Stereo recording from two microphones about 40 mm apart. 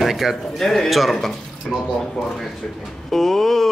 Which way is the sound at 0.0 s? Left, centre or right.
Centre.